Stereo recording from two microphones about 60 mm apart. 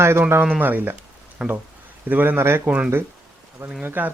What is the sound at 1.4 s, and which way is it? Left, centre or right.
Speech, centre.